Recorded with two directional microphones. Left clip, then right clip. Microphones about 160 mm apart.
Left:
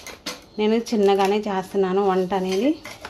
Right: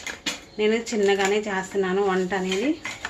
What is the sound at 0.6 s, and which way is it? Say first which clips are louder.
Speech: left 2 dB; 55° left (ahead or behind).